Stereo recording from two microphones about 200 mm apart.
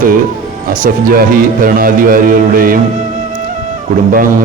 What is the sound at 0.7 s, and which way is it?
Speech, 45° right (ahead or behind).